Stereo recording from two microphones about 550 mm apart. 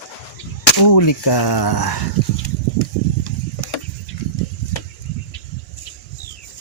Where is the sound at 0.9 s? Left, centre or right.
Left.